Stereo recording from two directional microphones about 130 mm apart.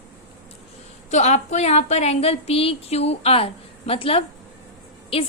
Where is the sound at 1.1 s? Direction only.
60° left (ahead or behind).